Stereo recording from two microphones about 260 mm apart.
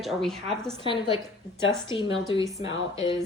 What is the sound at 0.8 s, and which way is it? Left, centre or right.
Speech, centre.